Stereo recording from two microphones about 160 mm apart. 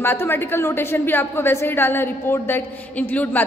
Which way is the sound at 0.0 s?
15° left (ahead or behind).